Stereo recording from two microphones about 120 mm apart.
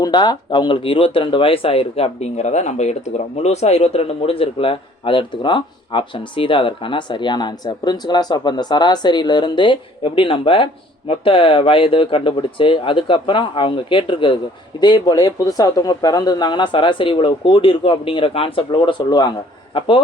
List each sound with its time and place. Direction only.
0.0 s a man's voice: 35° left (ahead or behind)